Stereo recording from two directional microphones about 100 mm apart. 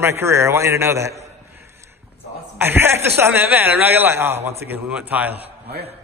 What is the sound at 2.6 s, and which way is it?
A man's voice, 20° right (ahead or behind).